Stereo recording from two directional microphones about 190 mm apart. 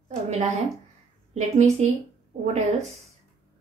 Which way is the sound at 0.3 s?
35° right (ahead or behind).